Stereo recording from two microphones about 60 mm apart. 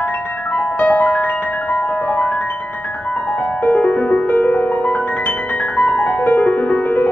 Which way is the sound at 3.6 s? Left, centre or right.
Centre.